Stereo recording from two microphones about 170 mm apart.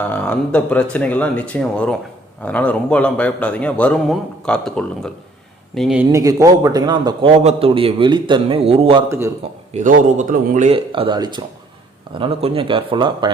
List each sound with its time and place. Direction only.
0.0 s a man's voice: 10° left (ahead or behind)
6.0 s a man's voice: 20° right (ahead or behind)
9.0 s a man's voice: 15° right (ahead or behind)
9.7 s a man's voice: 50° right (ahead or behind)
10.8 s a man's voice: 30° right (ahead or behind)